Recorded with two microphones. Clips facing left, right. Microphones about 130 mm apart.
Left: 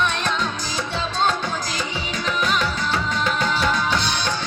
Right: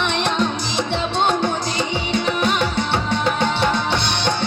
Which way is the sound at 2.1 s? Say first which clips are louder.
Right 3 dB; 25° right (ahead or behind).